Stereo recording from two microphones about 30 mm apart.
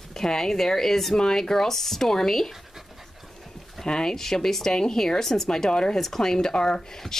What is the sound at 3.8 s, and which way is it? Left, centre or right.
Speech, left.